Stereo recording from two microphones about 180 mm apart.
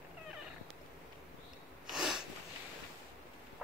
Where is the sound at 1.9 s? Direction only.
Centre (ahead or behind).